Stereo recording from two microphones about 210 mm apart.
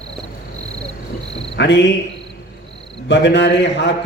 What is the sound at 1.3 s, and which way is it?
Cricket, 55° left (ahead or behind).